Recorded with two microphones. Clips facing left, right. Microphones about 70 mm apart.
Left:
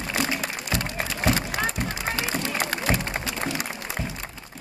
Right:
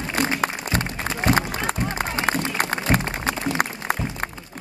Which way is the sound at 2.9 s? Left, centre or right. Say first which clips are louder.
Right 4 dB; right.